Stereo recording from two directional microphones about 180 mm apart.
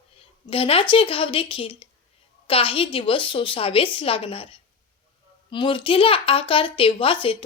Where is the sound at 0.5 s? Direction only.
30° left (ahead or behind).